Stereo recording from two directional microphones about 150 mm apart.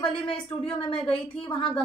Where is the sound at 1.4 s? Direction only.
35° left (ahead or behind).